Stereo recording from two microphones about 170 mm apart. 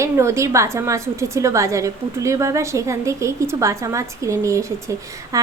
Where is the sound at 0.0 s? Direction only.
15° right (ahead or behind).